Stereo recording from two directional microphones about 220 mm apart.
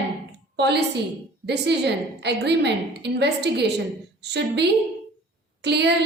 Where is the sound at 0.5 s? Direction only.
50° right (ahead or behind).